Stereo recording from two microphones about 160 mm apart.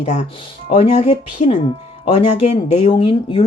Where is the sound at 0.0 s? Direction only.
50° left (ahead or behind).